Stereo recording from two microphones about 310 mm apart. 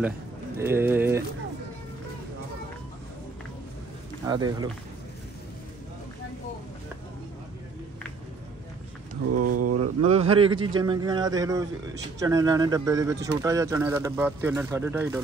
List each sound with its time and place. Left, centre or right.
0.6 s speech: centre
4.3 s speech: centre
9.1 s speech: right
10.0 s a man's voice: centre